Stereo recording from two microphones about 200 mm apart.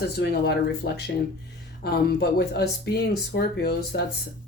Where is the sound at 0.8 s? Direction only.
50° left (ahead or behind).